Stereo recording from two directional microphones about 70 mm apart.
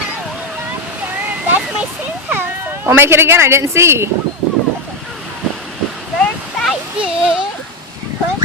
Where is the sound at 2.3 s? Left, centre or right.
Right.